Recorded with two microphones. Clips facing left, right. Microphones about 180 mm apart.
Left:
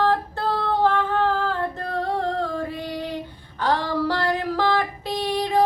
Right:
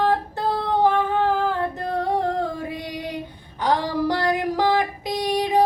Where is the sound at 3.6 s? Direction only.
15° right (ahead or behind).